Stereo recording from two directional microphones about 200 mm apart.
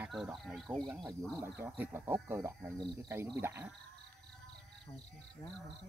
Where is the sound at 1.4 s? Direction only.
10° right (ahead or behind).